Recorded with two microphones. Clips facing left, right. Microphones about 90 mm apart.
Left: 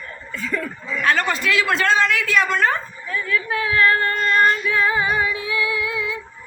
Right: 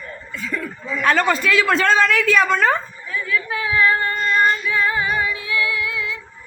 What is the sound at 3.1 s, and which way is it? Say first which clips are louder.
Female singing: left 1 dB; 5° right (ahead or behind).